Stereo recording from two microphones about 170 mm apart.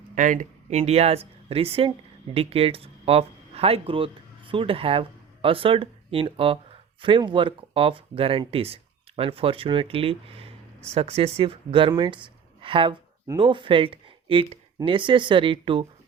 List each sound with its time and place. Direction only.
0.2 s speech: 50° right (ahead or behind); by 15.9 s 30° right (ahead or behind)